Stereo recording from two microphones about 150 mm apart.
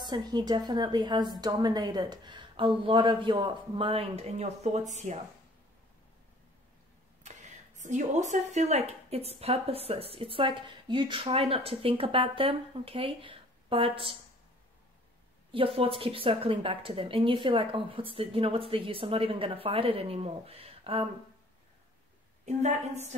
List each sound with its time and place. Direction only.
0.0 s a woman's voice: 30° right (ahead or behind); by 5.2 s 55° right (ahead or behind)
7.2 s a woman's voice: 55° right (ahead or behind); by 14.1 s 35° right (ahead or behind)
15.5 s a woman's voice: 35° right (ahead or behind)
22.4 s a woman's voice: 50° right (ahead or behind)